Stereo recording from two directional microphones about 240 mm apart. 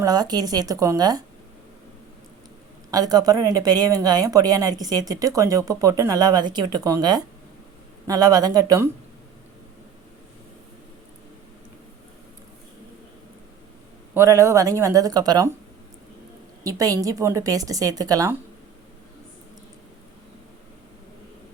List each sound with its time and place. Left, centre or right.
0.0 s speech: centre
2.9 s speech: centre
14.1 s speech: centre
16.6 s speech: centre